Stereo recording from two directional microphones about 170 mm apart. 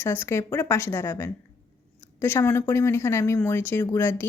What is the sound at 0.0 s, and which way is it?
Speech, 15° left (ahead or behind).